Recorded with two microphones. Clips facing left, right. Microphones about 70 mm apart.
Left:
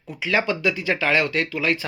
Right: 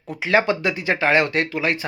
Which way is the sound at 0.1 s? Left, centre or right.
Right.